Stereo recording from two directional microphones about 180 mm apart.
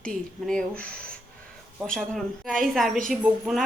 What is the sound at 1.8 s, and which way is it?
Speech, centre (ahead or behind).